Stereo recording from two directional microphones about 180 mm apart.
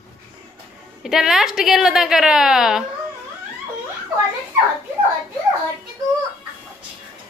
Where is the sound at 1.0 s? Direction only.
Centre (ahead or behind).